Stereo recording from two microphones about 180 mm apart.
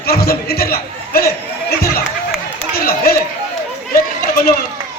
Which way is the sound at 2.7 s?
60° left (ahead or behind).